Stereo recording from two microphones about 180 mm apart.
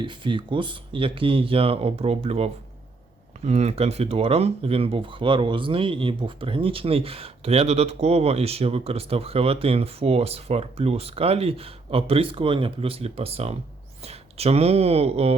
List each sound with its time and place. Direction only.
0.0 s speech: 25° right (ahead or behind)